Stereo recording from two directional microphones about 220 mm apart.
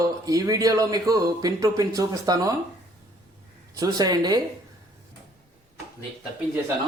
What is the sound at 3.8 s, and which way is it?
Speech, 15° right (ahead or behind).